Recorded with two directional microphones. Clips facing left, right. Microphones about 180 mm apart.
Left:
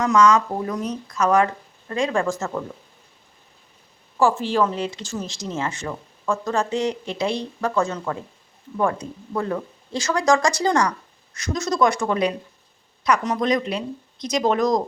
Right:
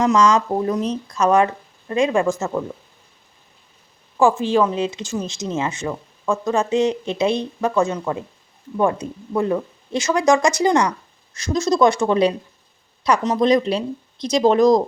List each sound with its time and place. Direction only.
0.0 s speech: 30° right (ahead or behind)
4.2 s speech: 15° right (ahead or behind)